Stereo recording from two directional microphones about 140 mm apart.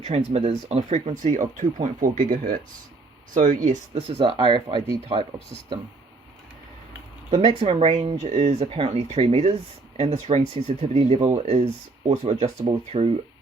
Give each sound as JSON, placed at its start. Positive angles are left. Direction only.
{"t": 0.0, "sound": "speech", "side_deg": -50}
{"t": 3.3, "sound": "speech", "side_deg": -70}
{"t": 7.6, "sound": "speech", "side_deg": -45}